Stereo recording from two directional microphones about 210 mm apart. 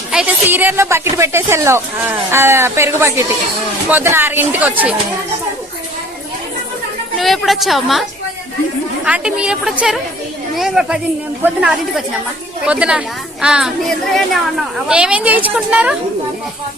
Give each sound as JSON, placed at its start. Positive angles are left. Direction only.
{"t": 0.1, "sound": "a woman's voice", "side_deg": -5}
{"t": 7.2, "sound": "speech", "side_deg": 0}
{"t": 9.0, "sound": "a woman's voice", "side_deg": -5}